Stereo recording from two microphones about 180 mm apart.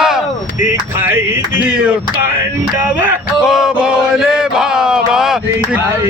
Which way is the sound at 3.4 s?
Centre (ahead or behind).